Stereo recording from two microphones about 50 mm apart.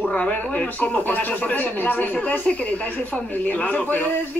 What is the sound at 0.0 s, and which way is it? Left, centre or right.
Speech, left.